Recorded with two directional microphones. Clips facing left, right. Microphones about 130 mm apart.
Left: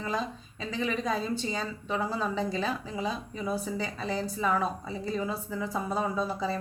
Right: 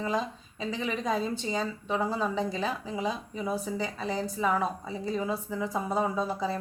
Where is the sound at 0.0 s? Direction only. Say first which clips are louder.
Right 2 dB; 20° right (ahead or behind).